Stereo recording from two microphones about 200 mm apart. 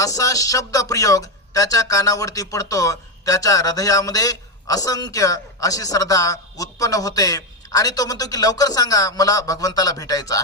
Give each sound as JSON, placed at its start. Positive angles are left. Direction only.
{"t": 0.0, "sound": "speech", "side_deg": 15}